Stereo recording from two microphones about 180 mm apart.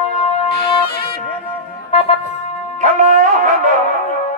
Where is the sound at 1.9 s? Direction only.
35° left (ahead or behind).